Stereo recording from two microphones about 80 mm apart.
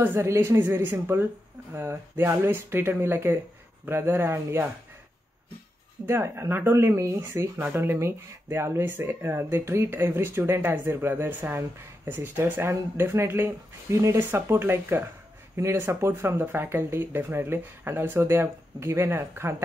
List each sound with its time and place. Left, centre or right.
0.0 s speech: right
6.0 s speech: right